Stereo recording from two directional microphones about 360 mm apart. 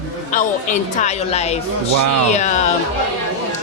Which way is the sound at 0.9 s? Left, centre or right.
Centre.